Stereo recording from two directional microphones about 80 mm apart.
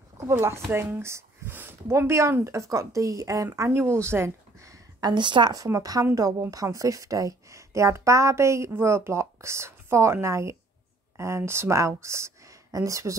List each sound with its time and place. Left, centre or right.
0.3 s a woman's voice: right
5.1 s a woman's voice: right
5.7 s a woman's voice: right